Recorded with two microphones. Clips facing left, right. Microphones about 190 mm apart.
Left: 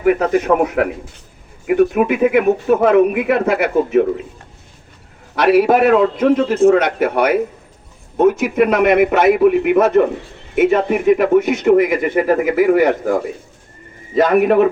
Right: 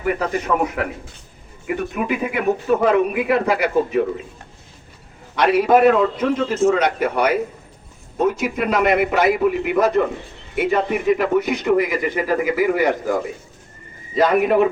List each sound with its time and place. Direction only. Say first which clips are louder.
0.0 s a man's voice: left 7 dB; 55° left (ahead or behind)
5.4 s a man's voice: left 2 dB; 65° left (ahead or behind)
14.2 s a man's voice: left 4 dB; 55° left (ahead or behind)